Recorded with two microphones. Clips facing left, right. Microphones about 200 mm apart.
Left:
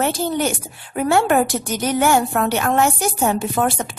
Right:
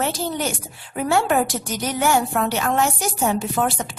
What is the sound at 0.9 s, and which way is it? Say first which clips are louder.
A woman's voice: left 3 dB; 55° left (ahead or behind).